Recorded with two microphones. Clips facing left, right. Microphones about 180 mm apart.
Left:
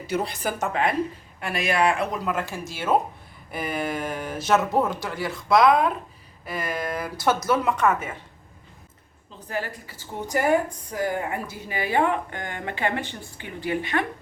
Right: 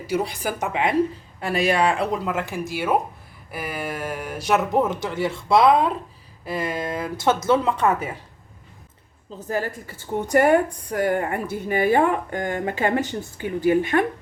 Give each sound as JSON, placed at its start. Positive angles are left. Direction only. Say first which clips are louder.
{"t": 0.1, "sound": "speech", "louder": "right 2 dB", "side_deg": -10}
{"t": 1.4, "sound": "speech", "louder": "right 3 dB", "side_deg": -35}
{"t": 9.5, "sound": "a woman's voice", "louder": "right 5 dB", "side_deg": -45}
{"t": 10.2, "sound": "a woman's voice", "louder": "right 5 dB", "side_deg": -60}